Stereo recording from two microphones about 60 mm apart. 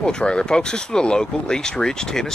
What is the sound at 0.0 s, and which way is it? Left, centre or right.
Speech, centre.